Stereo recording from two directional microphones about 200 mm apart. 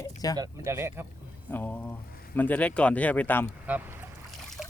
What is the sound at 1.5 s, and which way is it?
Speech, 10° left (ahead or behind).